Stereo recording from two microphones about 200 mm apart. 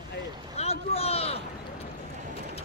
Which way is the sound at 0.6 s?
30° left (ahead or behind).